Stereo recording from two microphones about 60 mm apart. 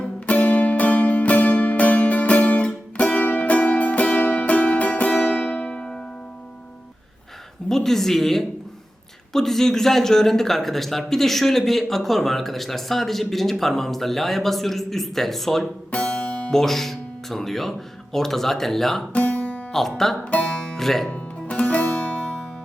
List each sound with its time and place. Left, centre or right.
0.0 s music: left
7.7 s a man's voice: centre
15.9 s music: centre
16.5 s speech: centre
19.1 s music: left
19.7 s a man's voice: centre
20.3 s speech: centre
20.7 s speech: centre
21.1 s music: left
22.2 s music: centre